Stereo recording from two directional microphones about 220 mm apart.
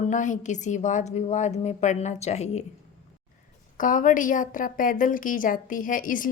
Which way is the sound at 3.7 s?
35° left (ahead or behind).